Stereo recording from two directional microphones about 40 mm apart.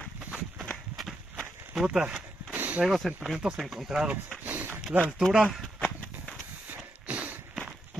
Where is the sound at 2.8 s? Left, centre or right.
Centre.